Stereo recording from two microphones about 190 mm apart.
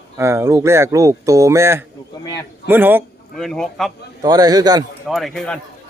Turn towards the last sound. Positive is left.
turn(degrees=5)  # may be behind; listen again after turning